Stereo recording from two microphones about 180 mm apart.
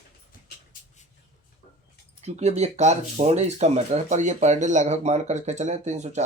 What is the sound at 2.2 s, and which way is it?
Speech, 40° right (ahead or behind).